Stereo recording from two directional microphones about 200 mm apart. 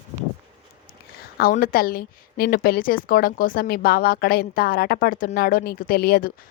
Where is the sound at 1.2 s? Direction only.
50° left (ahead or behind).